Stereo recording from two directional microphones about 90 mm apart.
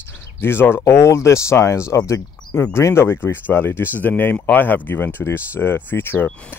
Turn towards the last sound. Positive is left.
turn(degrees=25)  # may be behind; listen again after turning